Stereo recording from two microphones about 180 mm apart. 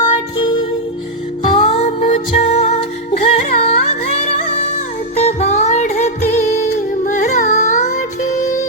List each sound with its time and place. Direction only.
0.0 s music: 25° left (ahead or behind)
5.2 s music: 35° left (ahead or behind)